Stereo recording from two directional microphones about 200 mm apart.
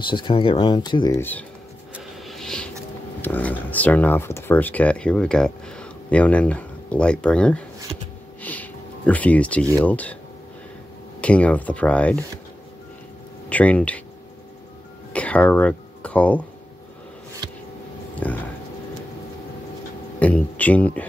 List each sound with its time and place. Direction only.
0.0 s speech: 25° left (ahead or behind)
2.0 s vehicle: centre (ahead or behind)
3.2 s speech: 10° left (ahead or behind)
11.1 s speech: 5° left (ahead or behind)
13.5 s speech: 5° left (ahead or behind)
15.1 s speech: 5° left (ahead or behind)
18.2 s speech: 10° left (ahead or behind)
20.2 s speech: 5° left (ahead or behind)